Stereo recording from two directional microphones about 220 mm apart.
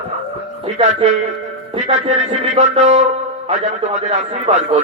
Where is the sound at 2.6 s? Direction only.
30° right (ahead or behind).